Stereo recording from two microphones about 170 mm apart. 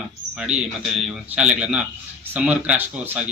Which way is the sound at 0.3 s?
5° right (ahead or behind).